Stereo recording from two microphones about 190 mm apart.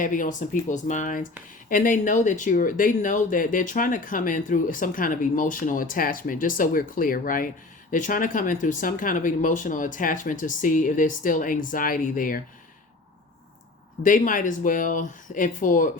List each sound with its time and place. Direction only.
0.0 s speech: 45° left (ahead or behind)
14.0 s speech: 45° left (ahead or behind)